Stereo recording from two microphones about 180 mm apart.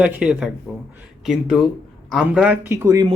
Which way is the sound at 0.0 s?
5° right (ahead or behind).